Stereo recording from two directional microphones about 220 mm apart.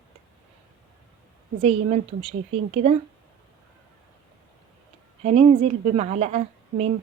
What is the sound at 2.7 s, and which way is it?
Speech, 30° right (ahead or behind).